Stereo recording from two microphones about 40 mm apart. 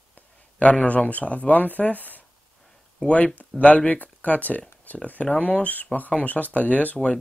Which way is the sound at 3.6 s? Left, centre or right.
Left.